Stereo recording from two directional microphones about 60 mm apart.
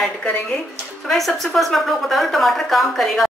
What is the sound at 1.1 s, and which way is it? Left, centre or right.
A woman's voice, centre.